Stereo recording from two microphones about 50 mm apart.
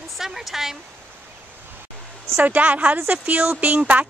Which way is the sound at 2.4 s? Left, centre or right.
Right.